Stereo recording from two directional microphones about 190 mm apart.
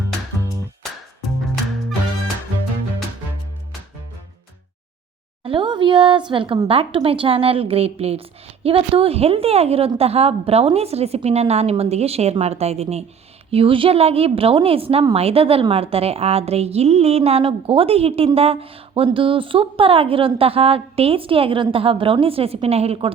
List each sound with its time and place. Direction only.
5.4 s a woman's voice: 25° right (ahead or behind)